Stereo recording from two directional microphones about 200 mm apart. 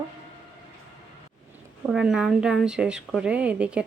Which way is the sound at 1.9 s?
5° right (ahead or behind).